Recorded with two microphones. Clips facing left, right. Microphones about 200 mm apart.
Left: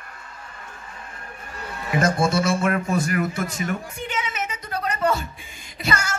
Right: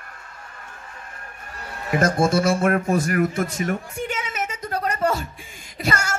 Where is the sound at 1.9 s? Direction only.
45° right (ahead or behind).